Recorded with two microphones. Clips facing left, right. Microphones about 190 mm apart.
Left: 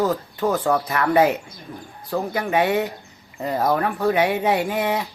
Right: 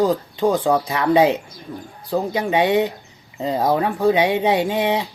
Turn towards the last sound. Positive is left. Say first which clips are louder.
# right 3 dB
turn(degrees=-20)  # may be behind; listen again after turning